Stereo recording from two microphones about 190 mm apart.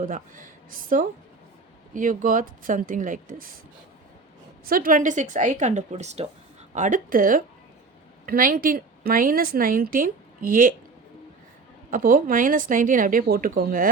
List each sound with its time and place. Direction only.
0.0 s a woman's voice: 45° right (ahead or behind)
4.6 s a woman's voice: 50° right (ahead or behind)
11.9 s a woman's voice: 50° right (ahead or behind)